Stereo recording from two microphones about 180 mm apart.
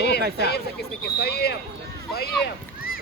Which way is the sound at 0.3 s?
60° left (ahead or behind).